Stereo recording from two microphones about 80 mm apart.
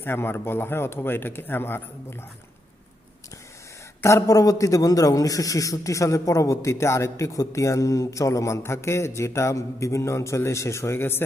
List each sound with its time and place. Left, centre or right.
0.0 s speech: left
4.0 s a man's voice: left